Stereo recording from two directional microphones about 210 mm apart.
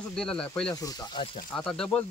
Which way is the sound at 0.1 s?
5° left (ahead or behind).